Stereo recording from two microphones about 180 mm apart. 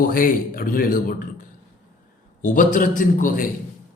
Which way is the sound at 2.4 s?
45° left (ahead or behind).